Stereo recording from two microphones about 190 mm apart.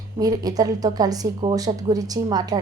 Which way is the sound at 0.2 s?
20° right (ahead or behind).